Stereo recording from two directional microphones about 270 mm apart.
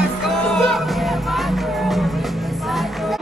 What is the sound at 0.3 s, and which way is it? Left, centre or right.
Music, centre.